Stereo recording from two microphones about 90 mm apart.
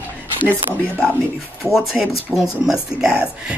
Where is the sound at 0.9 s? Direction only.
20° left (ahead or behind).